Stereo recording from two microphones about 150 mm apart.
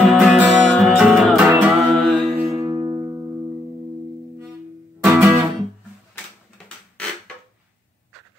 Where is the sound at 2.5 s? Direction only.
25° right (ahead or behind).